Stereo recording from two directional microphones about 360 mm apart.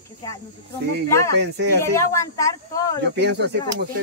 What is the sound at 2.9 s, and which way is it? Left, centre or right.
Speech, right.